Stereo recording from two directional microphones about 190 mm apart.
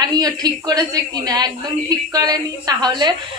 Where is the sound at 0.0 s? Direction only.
20° right (ahead or behind).